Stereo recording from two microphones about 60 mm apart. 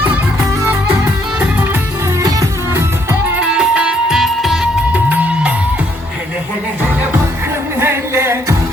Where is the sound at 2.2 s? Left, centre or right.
Right.